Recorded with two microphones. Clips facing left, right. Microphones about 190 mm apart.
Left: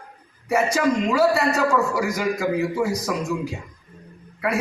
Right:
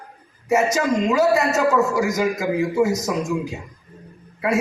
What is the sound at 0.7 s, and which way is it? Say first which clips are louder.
A man's voice: right 1 dB; 20° right (ahead or behind).